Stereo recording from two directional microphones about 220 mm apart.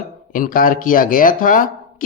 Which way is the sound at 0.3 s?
40° left (ahead or behind).